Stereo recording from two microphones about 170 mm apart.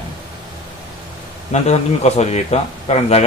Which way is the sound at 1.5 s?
40° left (ahead or behind).